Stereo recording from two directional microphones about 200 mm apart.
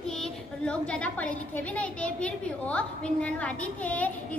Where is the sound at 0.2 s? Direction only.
5° left (ahead or behind).